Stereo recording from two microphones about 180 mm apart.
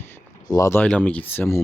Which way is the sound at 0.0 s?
15° left (ahead or behind).